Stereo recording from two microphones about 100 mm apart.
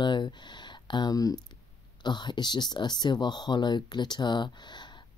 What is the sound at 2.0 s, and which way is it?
Speech, 50° left (ahead or behind).